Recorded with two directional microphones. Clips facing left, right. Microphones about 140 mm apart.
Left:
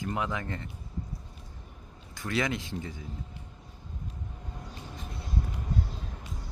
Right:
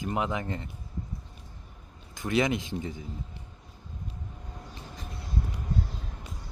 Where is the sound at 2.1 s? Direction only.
20° right (ahead or behind).